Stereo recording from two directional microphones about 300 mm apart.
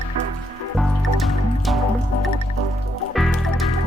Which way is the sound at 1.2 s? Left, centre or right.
Centre.